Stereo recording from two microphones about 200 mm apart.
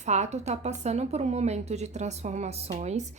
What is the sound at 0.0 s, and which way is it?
Speech, 35° right (ahead or behind).